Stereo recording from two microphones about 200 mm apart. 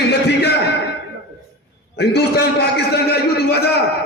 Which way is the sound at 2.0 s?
55° left (ahead or behind).